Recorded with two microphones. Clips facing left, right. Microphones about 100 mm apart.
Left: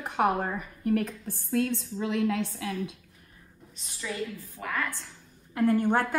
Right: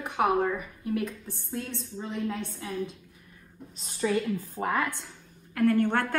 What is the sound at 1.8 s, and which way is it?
Speech, 75° left (ahead or behind).